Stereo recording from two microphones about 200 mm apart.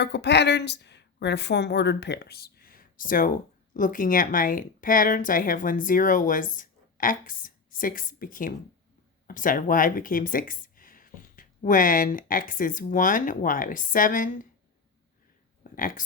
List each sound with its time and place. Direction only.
0.0 s a woman's voice: 55° left (ahead or behind); by 14.4 s 40° left (ahead or behind)
15.7 s speech: 45° left (ahead or behind)